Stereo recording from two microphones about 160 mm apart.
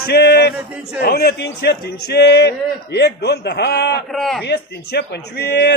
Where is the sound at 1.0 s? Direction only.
80° left.